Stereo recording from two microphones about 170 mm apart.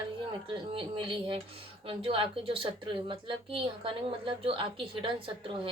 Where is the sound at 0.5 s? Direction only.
30° right (ahead or behind).